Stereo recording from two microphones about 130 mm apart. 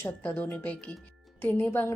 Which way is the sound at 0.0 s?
10° left (ahead or behind).